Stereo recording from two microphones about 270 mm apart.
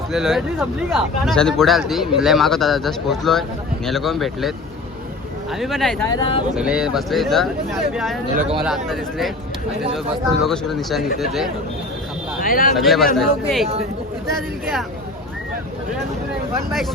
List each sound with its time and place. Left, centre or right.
0.1 s speech: centre
6.1 s speech: centre
6.6 s speech: centre
8.4 s speech: right
8.6 s speech: centre
10.4 s speech: centre
12.4 s speech: left
12.7 s speech: centre